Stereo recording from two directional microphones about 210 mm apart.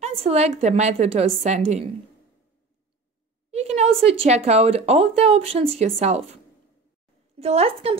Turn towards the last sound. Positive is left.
turn(degrees=-30)  # may be behind; listen again after turning